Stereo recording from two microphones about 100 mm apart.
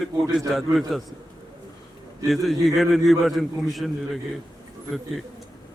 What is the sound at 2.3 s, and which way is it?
A man's voice, centre (ahead or behind).